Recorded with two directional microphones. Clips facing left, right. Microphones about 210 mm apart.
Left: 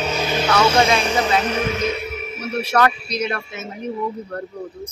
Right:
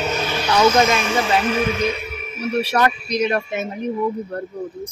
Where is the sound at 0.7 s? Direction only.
30° left (ahead or behind).